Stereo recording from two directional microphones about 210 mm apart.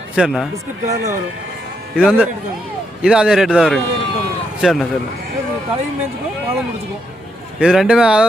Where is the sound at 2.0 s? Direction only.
5° right (ahead or behind).